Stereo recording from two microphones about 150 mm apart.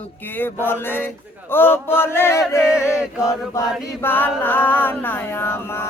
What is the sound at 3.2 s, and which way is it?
Chant, 20° left (ahead or behind).